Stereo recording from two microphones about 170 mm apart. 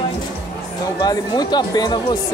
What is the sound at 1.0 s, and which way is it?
Speech, 25° left (ahead or behind).